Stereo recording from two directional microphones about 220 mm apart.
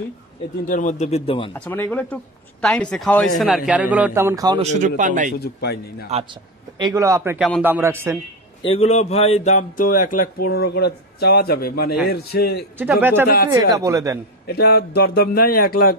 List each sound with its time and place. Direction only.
0.7 s a man's voice: 35° left (ahead or behind)
1.5 s a man's voice: 10° left (ahead or behind); by 4.6 s 15° right (ahead or behind)
4.6 s a man's voice: 35° right (ahead or behind)
5.4 s speech: 50° left (ahead or behind)
6.8 s speech: 15° right (ahead or behind)
7.3 s a man's voice: centre (ahead or behind)
7.6 s speech: 10° right (ahead or behind)
8.6 s a man's voice: 30° left (ahead or behind); by 12.6 s 45° left (ahead or behind)
12.7 s speech: 10° right (ahead or behind)
14.5 s speech: 45° left (ahead or behind)